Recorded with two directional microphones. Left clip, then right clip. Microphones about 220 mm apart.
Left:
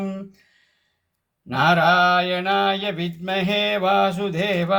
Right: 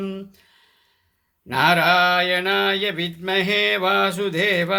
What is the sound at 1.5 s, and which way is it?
Mantra, 25° right (ahead or behind).